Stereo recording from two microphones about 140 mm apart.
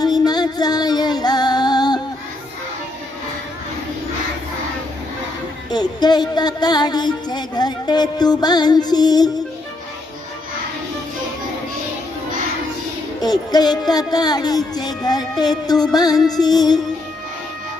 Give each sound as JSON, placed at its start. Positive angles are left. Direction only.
{"t": 0.0, "sound": "female singing", "side_deg": 30}
{"t": 5.7, "sound": "music", "side_deg": 30}
{"t": 13.2, "sound": "music", "side_deg": 30}